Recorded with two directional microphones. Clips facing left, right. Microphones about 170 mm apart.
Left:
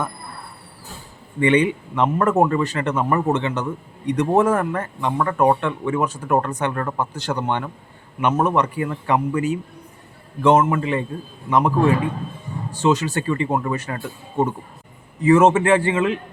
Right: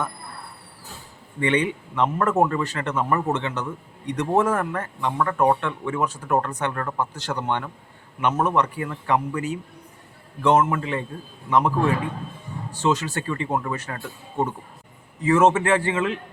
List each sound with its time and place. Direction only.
1.4 s speech: 15° left (ahead or behind)